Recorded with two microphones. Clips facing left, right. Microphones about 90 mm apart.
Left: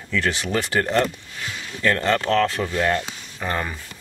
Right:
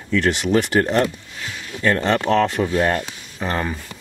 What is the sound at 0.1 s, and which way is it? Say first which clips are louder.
Speech: right 5 dB; 15° right (ahead or behind).